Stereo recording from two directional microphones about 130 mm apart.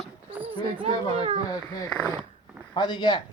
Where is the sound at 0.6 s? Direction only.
40° right (ahead or behind).